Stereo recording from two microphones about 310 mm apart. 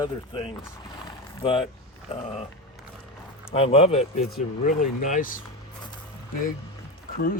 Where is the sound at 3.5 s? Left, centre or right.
Centre.